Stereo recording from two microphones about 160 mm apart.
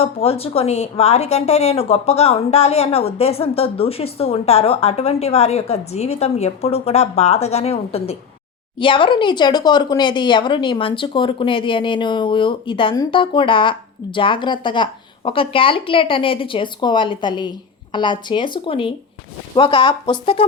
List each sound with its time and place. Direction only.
0.0 s speech: 40° left (ahead or behind)